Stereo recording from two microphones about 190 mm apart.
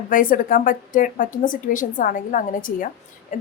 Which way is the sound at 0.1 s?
45° left (ahead or behind).